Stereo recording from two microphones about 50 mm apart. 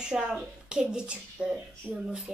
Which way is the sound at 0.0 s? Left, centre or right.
Centre.